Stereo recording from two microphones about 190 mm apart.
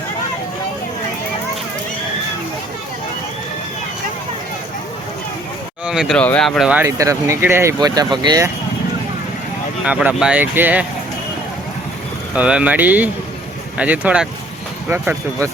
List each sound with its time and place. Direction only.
5.8 s speech: 5° right (ahead or behind)
6.8 s speech: 15° right (ahead or behind)
9.8 s speech: 5° right (ahead or behind)
12.3 s speech: 5° right (ahead or behind)